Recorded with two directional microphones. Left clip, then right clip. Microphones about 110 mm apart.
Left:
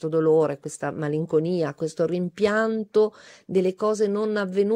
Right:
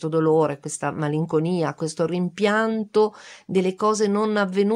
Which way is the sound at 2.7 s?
30° left (ahead or behind).